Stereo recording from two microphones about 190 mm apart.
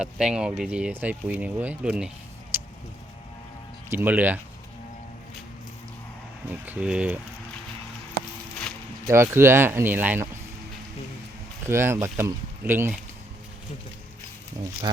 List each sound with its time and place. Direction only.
0.0 s speech: 5° right (ahead or behind)
3.8 s speech: 10° right (ahead or behind)
6.5 s speech: 10° right (ahead or behind)
9.0 s speech: 15° right (ahead or behind)
11.6 s speech: 15° right (ahead or behind)
14.9 s speech: 25° right (ahead or behind)